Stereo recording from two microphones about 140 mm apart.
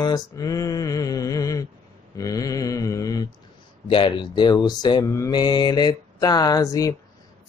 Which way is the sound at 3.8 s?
40° left (ahead or behind).